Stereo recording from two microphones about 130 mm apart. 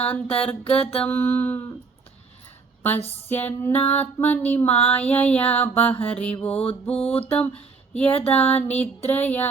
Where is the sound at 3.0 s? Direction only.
15° left (ahead or behind).